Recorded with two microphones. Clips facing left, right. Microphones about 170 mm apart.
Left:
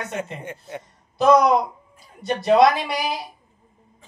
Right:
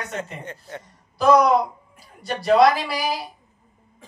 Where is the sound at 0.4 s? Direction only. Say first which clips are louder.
Left 2 dB; 10° left (ahead or behind).